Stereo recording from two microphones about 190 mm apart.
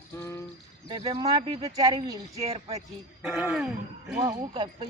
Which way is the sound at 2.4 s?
35° right (ahead or behind).